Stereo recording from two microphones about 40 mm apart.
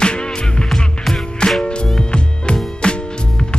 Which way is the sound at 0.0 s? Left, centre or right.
Left.